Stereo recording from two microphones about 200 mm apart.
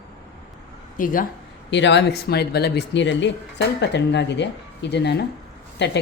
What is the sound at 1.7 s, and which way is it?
Speech, 60° left (ahead or behind).